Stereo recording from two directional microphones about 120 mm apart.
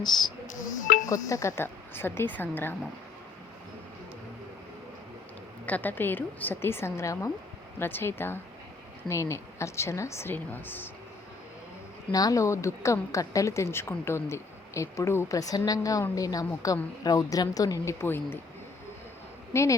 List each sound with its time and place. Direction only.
0.1 s speech: 35° left (ahead or behind)
0.4 s a sound: 90° left
1.0 s a woman's voice: 25° left (ahead or behind)
5.6 s a woman's voice: 15° left (ahead or behind)
12.1 s a woman's voice: 30° left (ahead or behind)
18.0 s a woman's voice: 20° left (ahead or behind)
19.5 s a woman's voice: 25° left (ahead or behind)